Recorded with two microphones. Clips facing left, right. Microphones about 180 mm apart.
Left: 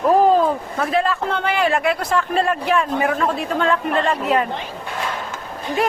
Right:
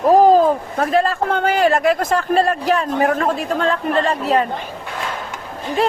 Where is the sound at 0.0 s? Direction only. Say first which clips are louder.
Right 3 dB; 40° right (ahead or behind).